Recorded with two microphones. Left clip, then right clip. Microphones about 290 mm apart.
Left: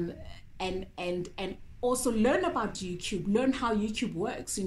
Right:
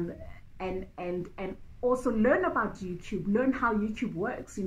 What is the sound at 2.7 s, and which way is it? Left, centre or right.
Speech, left.